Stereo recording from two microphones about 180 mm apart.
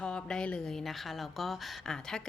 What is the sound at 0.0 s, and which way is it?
Speech, 5° left (ahead or behind).